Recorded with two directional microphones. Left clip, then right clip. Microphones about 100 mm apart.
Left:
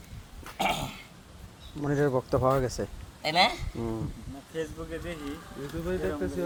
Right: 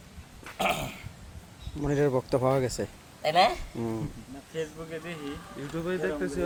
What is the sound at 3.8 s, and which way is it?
Speech, 5° right (ahead or behind).